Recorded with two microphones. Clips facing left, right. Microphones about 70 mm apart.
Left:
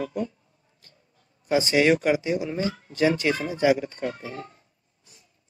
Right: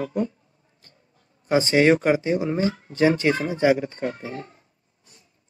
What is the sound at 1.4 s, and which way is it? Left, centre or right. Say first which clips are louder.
Speech: right 3 dB; right.